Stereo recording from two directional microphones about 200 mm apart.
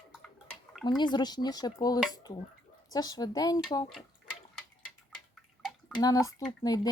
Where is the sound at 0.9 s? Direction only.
20° left (ahead or behind).